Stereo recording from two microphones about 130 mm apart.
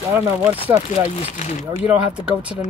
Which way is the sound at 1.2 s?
65° left (ahead or behind).